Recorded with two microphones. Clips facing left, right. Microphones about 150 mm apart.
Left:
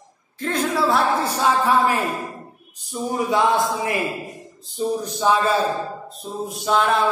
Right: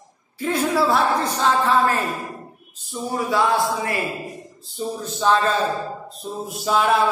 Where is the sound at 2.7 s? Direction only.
15° left (ahead or behind).